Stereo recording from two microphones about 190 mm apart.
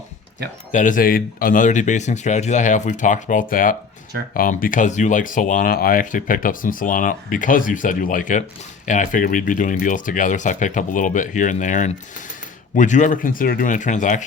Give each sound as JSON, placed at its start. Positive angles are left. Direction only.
{"t": 0.7, "sound": "speech", "side_deg": 40}